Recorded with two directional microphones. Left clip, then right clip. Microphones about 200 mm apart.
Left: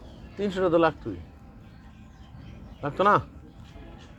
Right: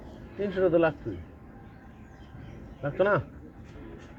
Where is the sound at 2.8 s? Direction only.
20° left (ahead or behind).